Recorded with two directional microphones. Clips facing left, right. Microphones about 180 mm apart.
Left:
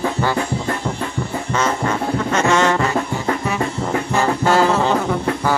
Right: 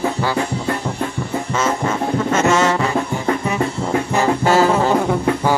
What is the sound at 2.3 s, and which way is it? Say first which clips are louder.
Music: even; 5° right (ahead or behind).